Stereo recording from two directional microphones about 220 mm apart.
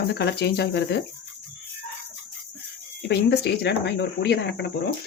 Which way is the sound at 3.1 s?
50° left (ahead or behind).